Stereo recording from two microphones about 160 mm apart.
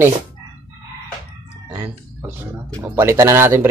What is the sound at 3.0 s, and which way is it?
Speech, 15° right (ahead or behind).